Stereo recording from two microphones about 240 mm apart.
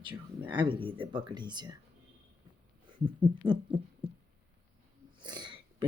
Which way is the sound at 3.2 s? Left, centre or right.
Centre.